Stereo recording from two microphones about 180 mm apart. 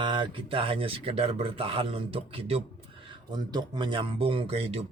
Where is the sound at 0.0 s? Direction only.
25° right (ahead or behind).